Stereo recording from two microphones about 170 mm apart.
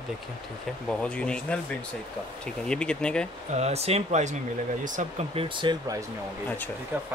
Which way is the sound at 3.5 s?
40° right (ahead or behind).